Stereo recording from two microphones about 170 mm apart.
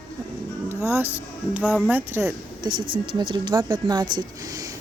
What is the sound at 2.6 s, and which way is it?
A woman's voice, 25° right (ahead or behind).